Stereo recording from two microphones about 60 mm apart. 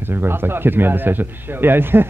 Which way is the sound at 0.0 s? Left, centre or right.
Right.